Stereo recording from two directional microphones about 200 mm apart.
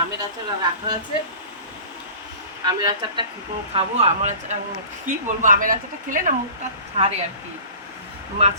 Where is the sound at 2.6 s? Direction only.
20° right (ahead or behind).